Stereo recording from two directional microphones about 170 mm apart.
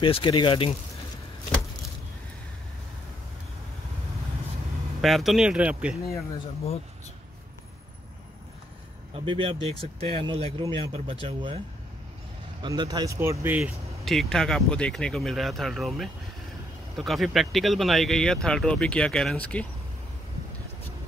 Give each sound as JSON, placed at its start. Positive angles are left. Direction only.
{"t": 0.0, "sound": "speech", "side_deg": 30}
{"t": 5.0, "sound": "speech", "side_deg": 0}
{"t": 9.1, "sound": "speech", "side_deg": -30}
{"t": 12.6, "sound": "speech", "side_deg": -25}